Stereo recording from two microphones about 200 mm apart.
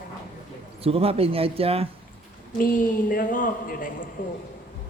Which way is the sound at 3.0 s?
45° left (ahead or behind).